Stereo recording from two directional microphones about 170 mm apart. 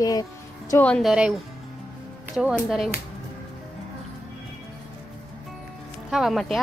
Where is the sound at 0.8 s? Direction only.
Centre (ahead or behind).